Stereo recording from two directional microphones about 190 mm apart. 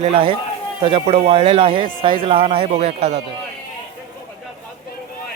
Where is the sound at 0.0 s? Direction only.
30° right (ahead or behind).